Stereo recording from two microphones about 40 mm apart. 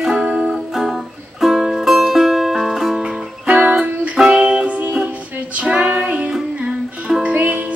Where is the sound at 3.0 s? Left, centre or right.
Right.